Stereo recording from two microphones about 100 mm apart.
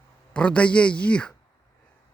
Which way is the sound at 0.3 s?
10° left (ahead or behind).